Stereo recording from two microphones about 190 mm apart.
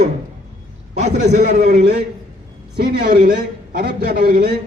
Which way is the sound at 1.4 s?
55° right (ahead or behind).